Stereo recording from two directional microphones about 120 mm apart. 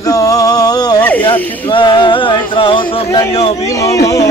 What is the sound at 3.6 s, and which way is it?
Speech, 25° left (ahead or behind).